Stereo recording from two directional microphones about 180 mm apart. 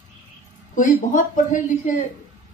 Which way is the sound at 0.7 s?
45° left (ahead or behind).